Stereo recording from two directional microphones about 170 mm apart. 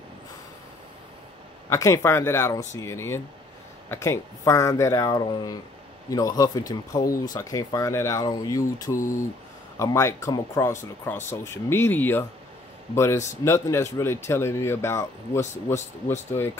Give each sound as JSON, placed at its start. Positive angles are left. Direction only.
{"t": 1.7, "sound": "speech", "side_deg": 20}